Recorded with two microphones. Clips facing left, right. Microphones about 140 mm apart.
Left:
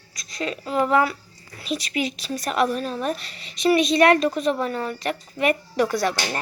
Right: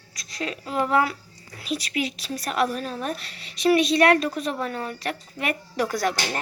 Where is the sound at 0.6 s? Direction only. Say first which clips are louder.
Left 2 dB; 5° right (ahead or behind).